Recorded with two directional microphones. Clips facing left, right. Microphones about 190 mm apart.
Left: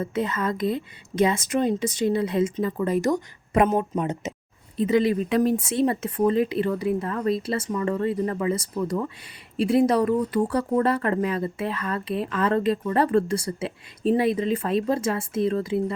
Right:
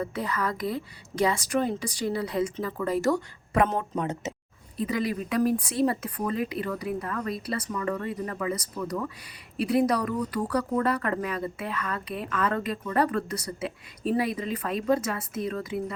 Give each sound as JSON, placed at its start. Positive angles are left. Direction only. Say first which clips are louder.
{"t": 0.0, "sound": "speech", "louder": "left 4 dB", "side_deg": 20}